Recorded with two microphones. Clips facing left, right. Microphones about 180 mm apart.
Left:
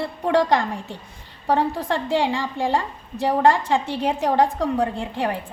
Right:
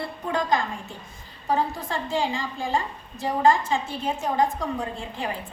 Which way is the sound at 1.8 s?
75° left (ahead or behind).